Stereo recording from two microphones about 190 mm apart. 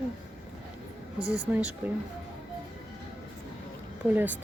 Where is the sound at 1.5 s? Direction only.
5° right (ahead or behind).